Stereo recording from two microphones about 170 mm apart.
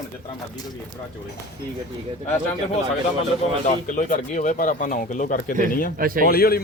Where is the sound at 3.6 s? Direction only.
50° left (ahead or behind).